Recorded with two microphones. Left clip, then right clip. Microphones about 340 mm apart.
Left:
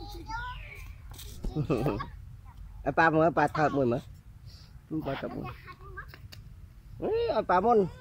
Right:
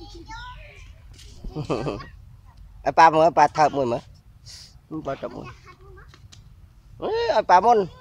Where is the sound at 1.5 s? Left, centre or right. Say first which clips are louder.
Right 3 dB; centre.